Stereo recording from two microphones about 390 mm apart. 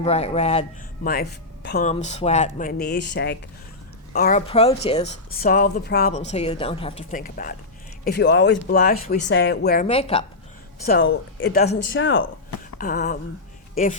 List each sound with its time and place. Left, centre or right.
0.0 s a woman's voice: centre
4.1 s a woman's voice: left
10.8 s a woman's voice: left